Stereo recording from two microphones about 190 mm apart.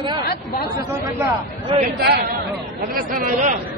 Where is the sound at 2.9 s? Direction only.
45° right (ahead or behind).